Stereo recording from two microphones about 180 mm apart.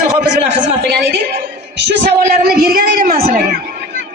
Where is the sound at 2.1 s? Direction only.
55° right (ahead or behind).